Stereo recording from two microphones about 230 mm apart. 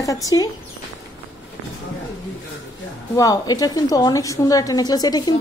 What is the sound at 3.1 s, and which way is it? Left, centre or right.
A woman's voice, centre.